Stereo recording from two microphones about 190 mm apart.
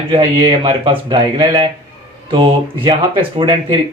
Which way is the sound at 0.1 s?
25° right (ahead or behind).